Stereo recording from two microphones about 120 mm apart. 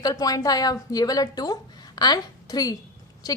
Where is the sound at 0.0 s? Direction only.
30° left (ahead or behind).